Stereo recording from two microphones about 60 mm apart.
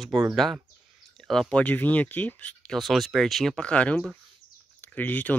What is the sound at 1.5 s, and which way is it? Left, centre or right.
Speech, left.